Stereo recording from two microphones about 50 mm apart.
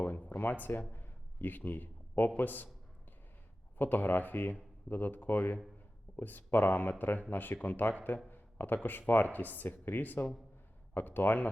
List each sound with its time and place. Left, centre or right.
0.0 s a sound: left
0.9 s a man's voice: left
3.8 s speech: left